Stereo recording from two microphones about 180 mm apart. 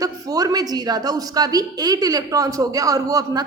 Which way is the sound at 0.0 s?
20° right (ahead or behind).